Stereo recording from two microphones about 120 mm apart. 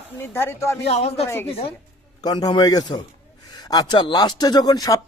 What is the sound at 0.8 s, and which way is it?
Speech, 60° left (ahead or behind).